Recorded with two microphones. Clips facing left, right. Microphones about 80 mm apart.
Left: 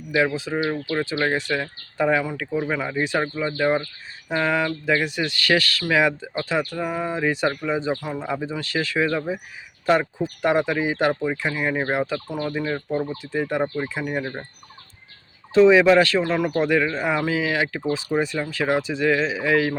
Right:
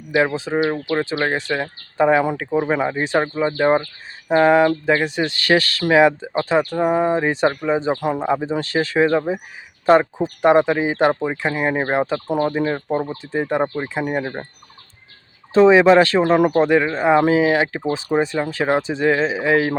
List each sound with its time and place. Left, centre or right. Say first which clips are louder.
0.3 s speech: right 4 dB; right
2.2 s speech: right 6 dB; right
15.5 s speech: right 3 dB; right